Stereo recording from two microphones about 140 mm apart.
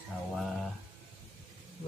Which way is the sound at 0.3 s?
Centre (ahead or behind).